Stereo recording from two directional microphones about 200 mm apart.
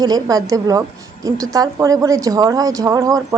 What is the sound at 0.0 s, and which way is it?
A woman's voice, 20° right (ahead or behind).